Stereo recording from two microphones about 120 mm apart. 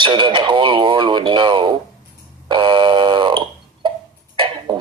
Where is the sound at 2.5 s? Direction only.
40° right (ahead or behind).